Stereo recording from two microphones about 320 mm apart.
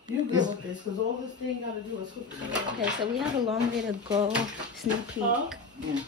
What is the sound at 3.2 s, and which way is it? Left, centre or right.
Speech, centre.